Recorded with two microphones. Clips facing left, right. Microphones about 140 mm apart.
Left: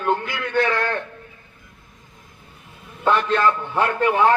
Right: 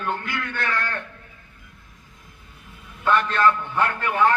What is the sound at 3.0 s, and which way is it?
A man's voice, 15° left (ahead or behind).